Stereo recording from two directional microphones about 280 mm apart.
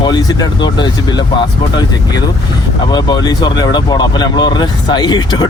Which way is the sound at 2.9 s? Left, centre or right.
Centre.